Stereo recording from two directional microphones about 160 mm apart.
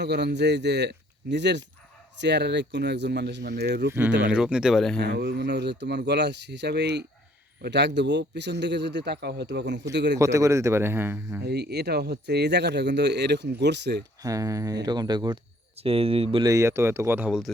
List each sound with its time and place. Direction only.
0.0 s speech: 90° right
4.2 s speech: 5° right (ahead or behind)
4.9 s speech: 90° right
10.2 s speech: 20° right (ahead or behind)
11.4 s speech: 90° right
14.2 s speech: 20° right (ahead or behind)
15.8 s speech: 35° right (ahead or behind)
16.4 s speech: 20° right (ahead or behind)